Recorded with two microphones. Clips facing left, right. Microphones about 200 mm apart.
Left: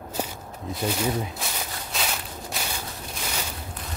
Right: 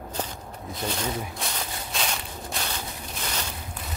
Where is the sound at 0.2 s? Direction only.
10° left (ahead or behind).